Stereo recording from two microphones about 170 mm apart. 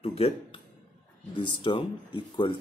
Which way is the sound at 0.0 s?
35° left (ahead or behind).